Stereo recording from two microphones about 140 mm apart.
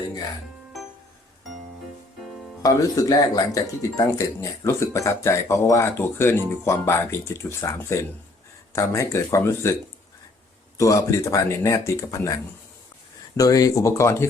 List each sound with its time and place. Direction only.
2.6 s speech: 25° left (ahead or behind)
10.8 s speech: 20° left (ahead or behind)